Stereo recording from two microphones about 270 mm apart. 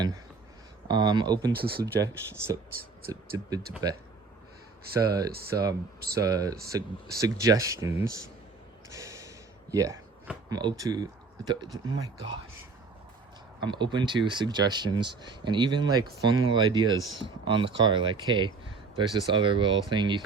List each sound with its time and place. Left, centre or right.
0.9 s speech: centre
1.5 s speech: right
3.1 s speech: centre
4.9 s speech: centre
8.9 s gasp: centre
9.7 s speech: centre
13.6 s speech: centre